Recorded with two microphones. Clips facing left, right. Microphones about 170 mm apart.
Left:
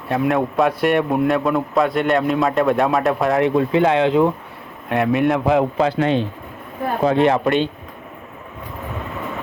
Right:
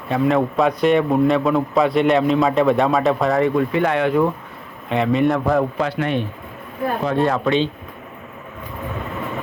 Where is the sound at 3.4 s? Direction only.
25° left (ahead or behind).